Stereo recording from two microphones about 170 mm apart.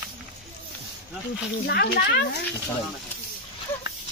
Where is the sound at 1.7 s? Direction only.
70° left (ahead or behind).